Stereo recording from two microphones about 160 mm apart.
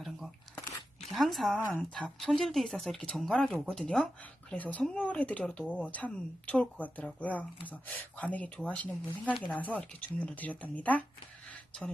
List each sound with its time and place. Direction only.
1.1 s speech: centre (ahead or behind)